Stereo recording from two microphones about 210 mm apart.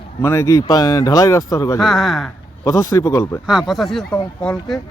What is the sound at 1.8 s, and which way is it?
Speech, centre (ahead or behind).